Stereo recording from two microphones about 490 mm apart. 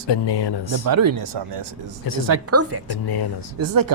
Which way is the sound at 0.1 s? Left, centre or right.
Left.